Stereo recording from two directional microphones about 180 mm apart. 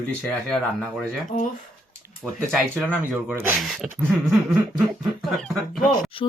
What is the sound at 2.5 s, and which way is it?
Speech, 5° right (ahead or behind).